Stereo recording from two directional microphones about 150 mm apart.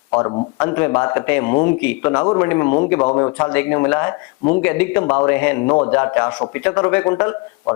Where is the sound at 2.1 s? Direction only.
25° left (ahead or behind).